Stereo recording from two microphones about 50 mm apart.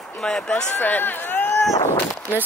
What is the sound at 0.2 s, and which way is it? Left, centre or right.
Speech, left.